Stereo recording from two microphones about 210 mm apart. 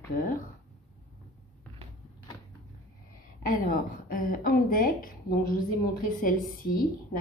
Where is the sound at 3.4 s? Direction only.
40° left (ahead or behind).